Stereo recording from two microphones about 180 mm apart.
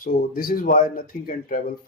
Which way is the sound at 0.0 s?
55° left (ahead or behind).